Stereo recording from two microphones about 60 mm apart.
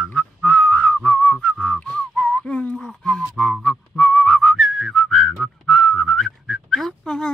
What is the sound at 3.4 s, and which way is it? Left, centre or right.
Whistling, centre.